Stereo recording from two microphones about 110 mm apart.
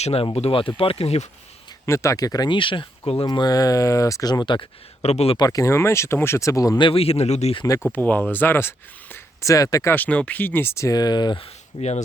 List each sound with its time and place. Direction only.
0.0 s speech: 65° left (ahead or behind)
1.9 s speech: 30° left (ahead or behind); by 3.2 s 55° left (ahead or behind)
3.2 s speech: 40° left (ahead or behind)
5.0 s speech: 70° left (ahead or behind)
5.4 s speech: 30° left (ahead or behind)
6.7 s speech: 55° left (ahead or behind); by 7.5 s 85° left
7.9 s speech: 15° left (ahead or behind); by 9.9 s 30° left (ahead or behind)
9.9 s speech: 15° left (ahead or behind); by 11.4 s 40° left (ahead or behind)
11.8 s speech: 85° left